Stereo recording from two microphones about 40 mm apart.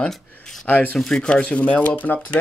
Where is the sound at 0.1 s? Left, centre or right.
Centre.